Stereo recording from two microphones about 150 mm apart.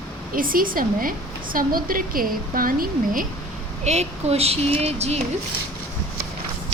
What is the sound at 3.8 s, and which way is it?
Speech, 45° right (ahead or behind).